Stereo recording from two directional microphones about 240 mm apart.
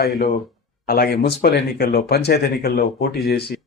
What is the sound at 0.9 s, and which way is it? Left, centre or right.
Speech, left.